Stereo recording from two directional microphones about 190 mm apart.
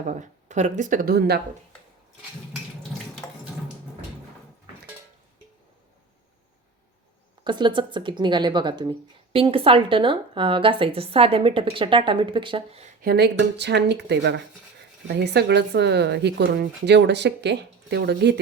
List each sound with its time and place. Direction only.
0.0 s speech: 40° right (ahead or behind)
7.4 s speech: 25° right (ahead or behind)
13.0 s speech: 55° right (ahead or behind)